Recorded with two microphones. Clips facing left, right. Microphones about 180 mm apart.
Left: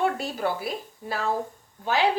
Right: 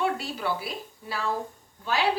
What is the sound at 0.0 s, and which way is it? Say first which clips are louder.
A woman's voice: left 3 dB; 50° left (ahead or behind).